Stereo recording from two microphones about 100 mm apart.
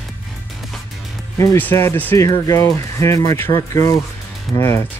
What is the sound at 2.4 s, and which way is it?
Speech, 35° left (ahead or behind).